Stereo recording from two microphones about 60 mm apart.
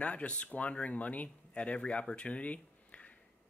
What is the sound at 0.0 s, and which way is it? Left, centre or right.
Speech, left.